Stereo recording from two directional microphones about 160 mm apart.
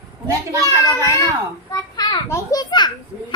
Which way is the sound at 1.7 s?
25° left (ahead or behind).